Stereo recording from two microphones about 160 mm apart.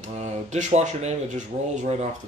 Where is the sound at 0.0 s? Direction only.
45° right (ahead or behind).